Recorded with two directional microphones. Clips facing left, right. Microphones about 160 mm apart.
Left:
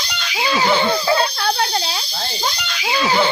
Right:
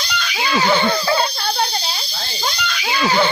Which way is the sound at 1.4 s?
70° left (ahead or behind).